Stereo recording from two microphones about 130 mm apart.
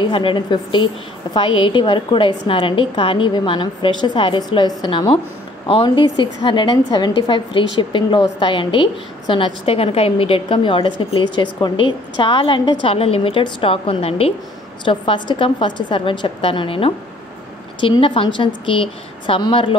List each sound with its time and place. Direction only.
0.0 s a woman's voice: 40° left (ahead or behind)
14.9 s a woman's voice: 40° left (ahead or behind)